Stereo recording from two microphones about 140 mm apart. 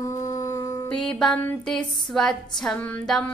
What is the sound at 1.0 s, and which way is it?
A woman's voice, 5° left (ahead or behind).